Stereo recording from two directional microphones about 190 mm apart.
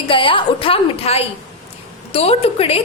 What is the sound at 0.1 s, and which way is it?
A woman's voice, 25° left (ahead or behind).